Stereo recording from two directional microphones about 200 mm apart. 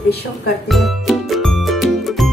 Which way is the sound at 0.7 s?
Centre (ahead or behind).